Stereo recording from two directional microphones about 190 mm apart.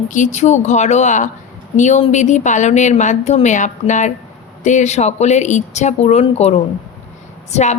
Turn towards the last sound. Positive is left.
turn(degrees=35)  # may be behind; listen again after turning